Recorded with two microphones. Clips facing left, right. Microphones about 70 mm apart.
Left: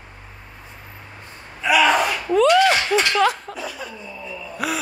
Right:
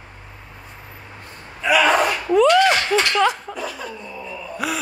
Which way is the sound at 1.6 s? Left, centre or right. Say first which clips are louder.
Even; centre.